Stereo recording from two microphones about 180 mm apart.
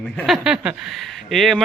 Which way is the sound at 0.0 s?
5° left (ahead or behind).